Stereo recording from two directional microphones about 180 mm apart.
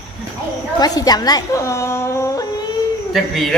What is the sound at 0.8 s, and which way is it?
A woman's voice, 20° left (ahead or behind).